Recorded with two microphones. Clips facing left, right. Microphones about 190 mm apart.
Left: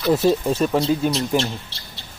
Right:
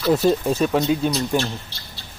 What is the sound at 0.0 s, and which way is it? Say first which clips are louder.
Speech: even; 5° left (ahead or behind).